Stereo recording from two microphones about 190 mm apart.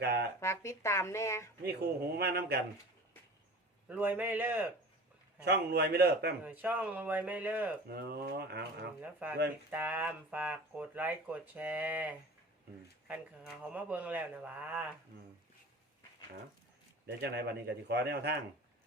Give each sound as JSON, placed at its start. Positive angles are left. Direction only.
{"t": 0.0, "sound": "speech", "side_deg": -60}
{"t": 0.3, "sound": "speech", "side_deg": 15}
{"t": 2.1, "sound": "speech", "side_deg": -55}
{"t": 3.8, "sound": "speech", "side_deg": -10}
{"t": 5.5, "sound": "speech", "side_deg": -60}
{"t": 6.4, "sound": "speech", "side_deg": -10}
{"t": 7.9, "sound": "speech", "side_deg": -55}
{"t": 9.0, "sound": "speech", "side_deg": -10}
{"t": 17.1, "sound": "speech", "side_deg": -60}